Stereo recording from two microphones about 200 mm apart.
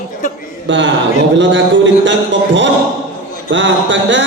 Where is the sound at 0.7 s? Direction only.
65° right (ahead or behind).